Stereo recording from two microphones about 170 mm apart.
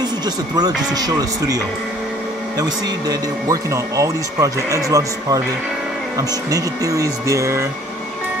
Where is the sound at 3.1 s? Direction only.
20° right (ahead or behind).